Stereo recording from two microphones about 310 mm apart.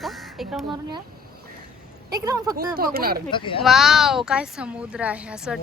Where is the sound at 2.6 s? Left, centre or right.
Right.